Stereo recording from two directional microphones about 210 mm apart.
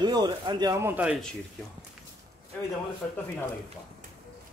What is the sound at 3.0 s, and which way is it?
Speech, 5° left (ahead or behind).